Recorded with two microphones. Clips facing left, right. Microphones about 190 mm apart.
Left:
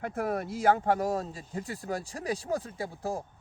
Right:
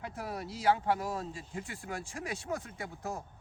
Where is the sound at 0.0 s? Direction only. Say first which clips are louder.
Left 8 dB; 55° left (ahead or behind).